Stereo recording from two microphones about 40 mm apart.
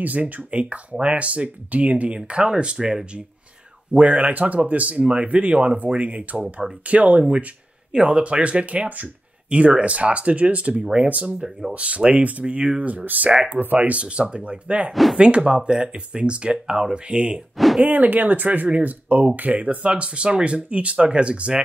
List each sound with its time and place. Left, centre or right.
0.0 s speech: right
7.9 s speech: right
9.5 s speech: right
11.1 s speech: right
12.8 s speech: right
13.7 s speech: right
14.9 s speech: centre
15.1 s speech: right
17.8 s speech: right